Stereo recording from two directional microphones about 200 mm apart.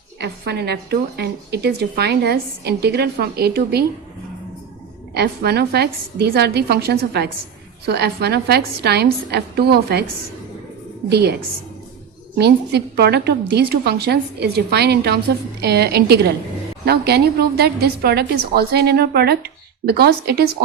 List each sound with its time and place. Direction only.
0.2 s a woman's voice: 55° right (ahead or behind)
5.1 s a woman's voice: 55° right (ahead or behind)
11.1 s a woman's voice: 55° right (ahead or behind)
12.4 s a woman's voice: 55° right (ahead or behind)